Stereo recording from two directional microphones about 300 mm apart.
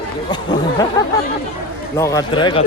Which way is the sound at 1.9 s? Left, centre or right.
Centre.